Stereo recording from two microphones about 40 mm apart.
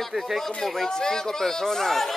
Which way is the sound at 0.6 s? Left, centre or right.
Centre.